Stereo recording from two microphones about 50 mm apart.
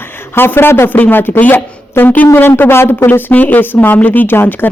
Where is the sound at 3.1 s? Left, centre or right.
Left.